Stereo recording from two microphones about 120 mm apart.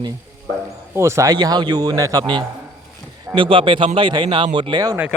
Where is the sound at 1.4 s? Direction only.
35° right (ahead or behind).